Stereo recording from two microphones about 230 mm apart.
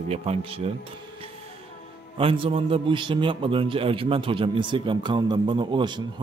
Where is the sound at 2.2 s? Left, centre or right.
Right.